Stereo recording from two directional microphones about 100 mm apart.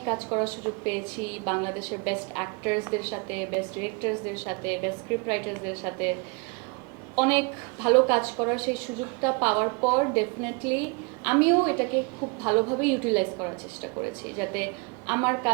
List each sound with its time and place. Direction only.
0.0 s a woman's voice: 20° right (ahead or behind)
7.2 s a woman's voice: 15° right (ahead or behind)